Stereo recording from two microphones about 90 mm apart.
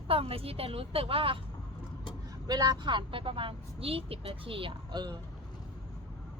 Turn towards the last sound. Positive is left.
turn(degrees=-60)  # may be behind; listen again after turning